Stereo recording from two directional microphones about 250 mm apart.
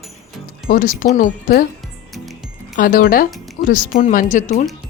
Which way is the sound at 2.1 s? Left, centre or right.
Centre.